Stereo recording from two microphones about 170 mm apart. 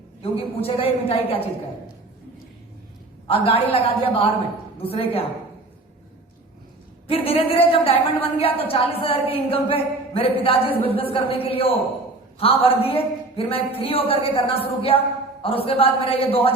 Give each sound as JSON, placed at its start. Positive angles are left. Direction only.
{"t": 0.2, "sound": "speech", "side_deg": 35}
{"t": 3.2, "sound": "speech", "side_deg": 35}
{"t": 7.1, "sound": "speech", "side_deg": 35}